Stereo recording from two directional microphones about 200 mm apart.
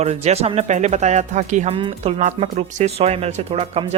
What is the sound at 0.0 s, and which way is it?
Speech, 30° right (ahead or behind).